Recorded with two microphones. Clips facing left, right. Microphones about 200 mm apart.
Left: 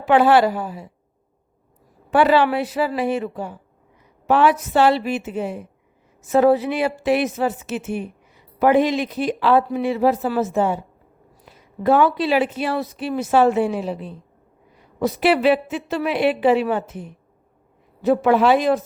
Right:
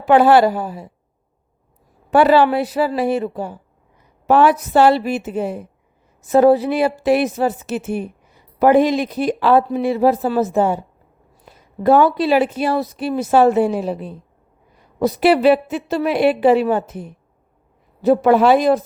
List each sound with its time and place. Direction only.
0.0 s speech: 40° right (ahead or behind)
2.0 s a woman's voice: 40° right (ahead or behind)
9.6 s speech: 30° right (ahead or behind)
11.8 s speech: 40° right (ahead or behind)